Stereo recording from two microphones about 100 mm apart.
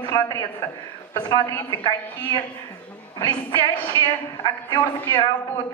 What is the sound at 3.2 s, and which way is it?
Speech, 30° left (ahead or behind).